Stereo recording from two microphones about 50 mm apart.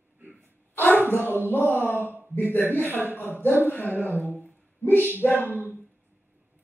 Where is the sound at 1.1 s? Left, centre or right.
Left.